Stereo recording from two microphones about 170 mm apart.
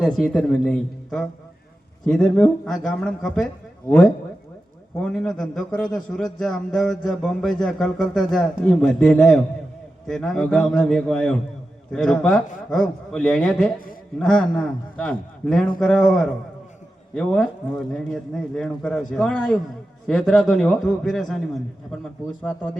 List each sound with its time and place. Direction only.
0.0 s a man's voice: centre (ahead or behind)